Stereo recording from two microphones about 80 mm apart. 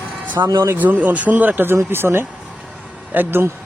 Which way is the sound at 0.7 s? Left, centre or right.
Right.